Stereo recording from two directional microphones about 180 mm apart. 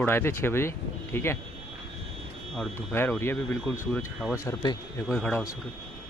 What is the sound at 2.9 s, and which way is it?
Speech, 10° left (ahead or behind).